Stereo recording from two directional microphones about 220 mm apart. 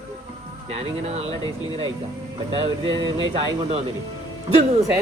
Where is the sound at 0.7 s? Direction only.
30° right (ahead or behind).